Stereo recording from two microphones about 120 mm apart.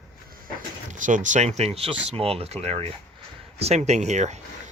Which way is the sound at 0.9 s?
90° right.